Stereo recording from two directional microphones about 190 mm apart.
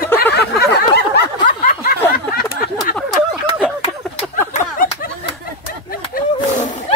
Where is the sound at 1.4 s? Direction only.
45° left (ahead or behind).